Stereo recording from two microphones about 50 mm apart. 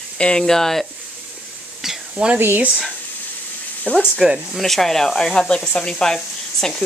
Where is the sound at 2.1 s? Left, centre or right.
Right.